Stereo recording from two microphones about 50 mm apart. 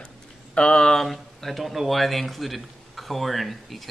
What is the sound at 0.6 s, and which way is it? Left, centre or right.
Speech, centre.